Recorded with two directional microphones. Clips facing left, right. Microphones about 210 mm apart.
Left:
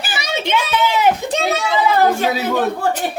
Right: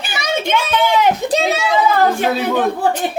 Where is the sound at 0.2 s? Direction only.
50° right (ahead or behind).